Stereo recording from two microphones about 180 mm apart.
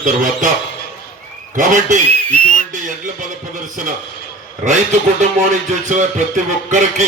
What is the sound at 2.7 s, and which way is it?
Music, 45° right (ahead or behind).